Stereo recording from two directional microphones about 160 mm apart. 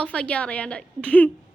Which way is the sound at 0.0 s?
5° left (ahead or behind).